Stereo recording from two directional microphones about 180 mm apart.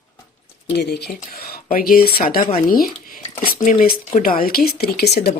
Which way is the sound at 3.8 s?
50° left (ahead or behind).